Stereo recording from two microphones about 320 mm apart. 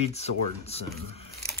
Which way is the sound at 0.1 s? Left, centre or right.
Centre.